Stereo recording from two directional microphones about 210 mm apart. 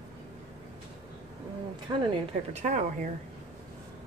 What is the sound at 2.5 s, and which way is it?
Speech, 35° right (ahead or behind).